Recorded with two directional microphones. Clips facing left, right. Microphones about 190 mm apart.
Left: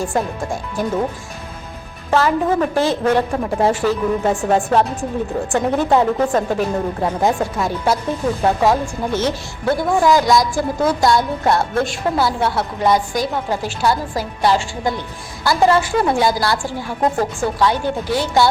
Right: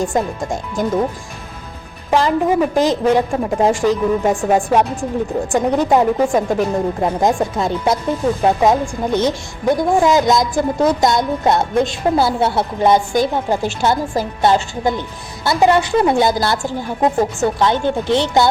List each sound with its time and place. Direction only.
0.0 s a woman's voice: 20° right (ahead or behind)
2.0 s a woman's voice: 15° right (ahead or behind)